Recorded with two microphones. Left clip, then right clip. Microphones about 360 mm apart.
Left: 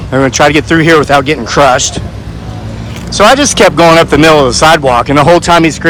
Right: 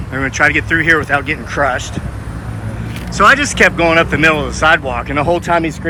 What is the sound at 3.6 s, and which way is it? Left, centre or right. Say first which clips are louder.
Speech: left 7 dB; left.